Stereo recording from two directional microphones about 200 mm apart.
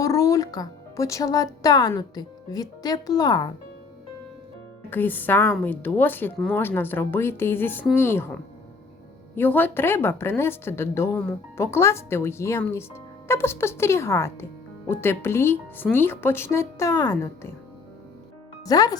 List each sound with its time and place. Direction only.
0.0 s speech: 15° left (ahead or behind)
4.9 s speech: 10° left (ahead or behind)
18.6 s speech: 20° left (ahead or behind)